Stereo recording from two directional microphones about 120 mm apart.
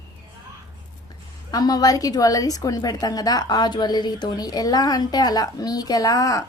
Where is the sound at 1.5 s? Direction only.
30° left (ahead or behind).